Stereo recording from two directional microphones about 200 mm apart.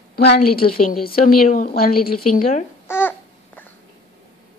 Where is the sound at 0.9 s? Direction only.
45° left (ahead or behind).